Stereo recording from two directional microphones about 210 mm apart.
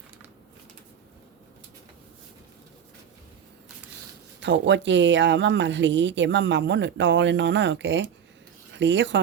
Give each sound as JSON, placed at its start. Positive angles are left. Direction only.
{"t": 4.4, "sound": "speech", "side_deg": -60}